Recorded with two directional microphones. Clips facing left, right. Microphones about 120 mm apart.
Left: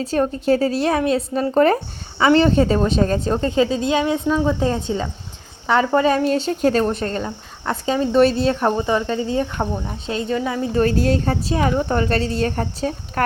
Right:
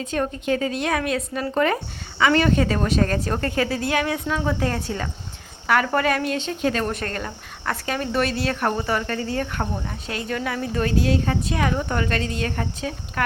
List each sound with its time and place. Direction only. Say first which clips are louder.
0.0 s speech: left 5 dB; 35° left (ahead or behind)
10.8 s a woman's voice: left 4 dB; 40° left (ahead or behind)